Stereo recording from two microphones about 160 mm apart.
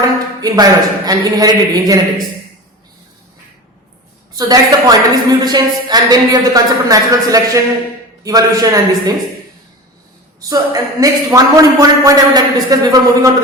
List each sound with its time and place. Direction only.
0.4 s a man's voice: 25° right (ahead or behind)
4.4 s a man's voice: 25° right (ahead or behind)
10.5 s a man's voice: 20° right (ahead or behind)